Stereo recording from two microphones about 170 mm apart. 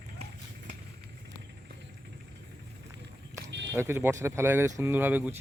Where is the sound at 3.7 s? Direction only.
15° right (ahead or behind).